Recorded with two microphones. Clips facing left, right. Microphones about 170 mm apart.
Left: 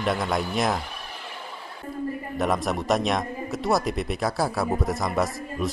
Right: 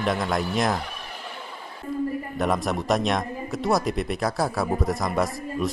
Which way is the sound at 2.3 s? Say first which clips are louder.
Left 1 dB; centre (ahead or behind).